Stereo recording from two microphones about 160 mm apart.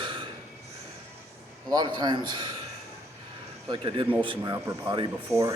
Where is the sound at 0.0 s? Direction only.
30° right (ahead or behind).